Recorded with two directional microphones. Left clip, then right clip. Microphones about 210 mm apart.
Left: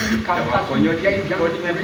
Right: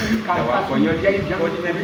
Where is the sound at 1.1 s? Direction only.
50° left (ahead or behind).